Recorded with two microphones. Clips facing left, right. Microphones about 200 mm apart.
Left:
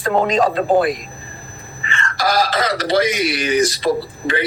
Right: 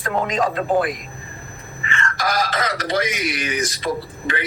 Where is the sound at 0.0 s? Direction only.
30° left (ahead or behind).